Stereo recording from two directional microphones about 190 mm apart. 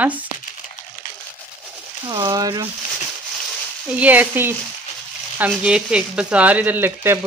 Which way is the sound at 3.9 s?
10° right (ahead or behind).